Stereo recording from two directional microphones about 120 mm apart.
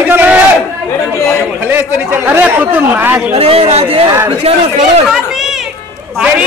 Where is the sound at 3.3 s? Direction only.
55° right (ahead or behind).